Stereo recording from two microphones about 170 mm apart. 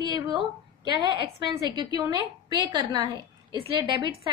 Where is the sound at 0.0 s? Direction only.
25° right (ahead or behind).